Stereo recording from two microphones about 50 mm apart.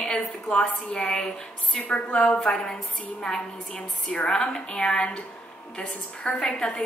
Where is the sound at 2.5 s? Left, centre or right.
Centre.